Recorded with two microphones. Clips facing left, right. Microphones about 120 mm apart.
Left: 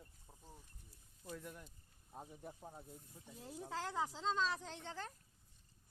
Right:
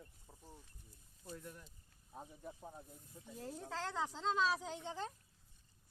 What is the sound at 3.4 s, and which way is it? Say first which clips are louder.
Speech: right 1 dB; 15° left (ahead or behind).